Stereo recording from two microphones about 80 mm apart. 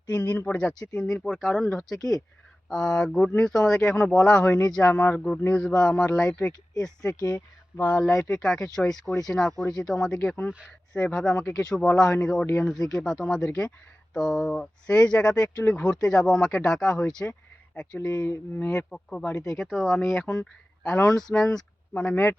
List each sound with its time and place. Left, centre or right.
0.1 s speech: left
7.1 s speech: left
7.8 s speech: centre
19.5 s speech: centre
20.4 s speech: centre
21.9 s speech: centre